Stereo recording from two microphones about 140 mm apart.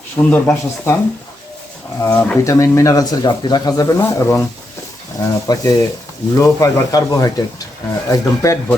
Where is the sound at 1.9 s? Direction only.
20° left (ahead or behind).